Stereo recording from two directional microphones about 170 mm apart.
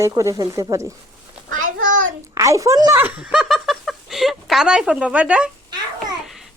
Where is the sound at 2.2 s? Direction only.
20° right (ahead or behind).